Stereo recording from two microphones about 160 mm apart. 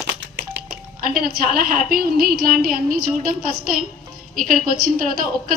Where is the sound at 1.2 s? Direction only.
70° right (ahead or behind).